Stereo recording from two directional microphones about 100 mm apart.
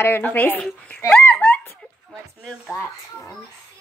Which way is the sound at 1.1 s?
15° left (ahead or behind).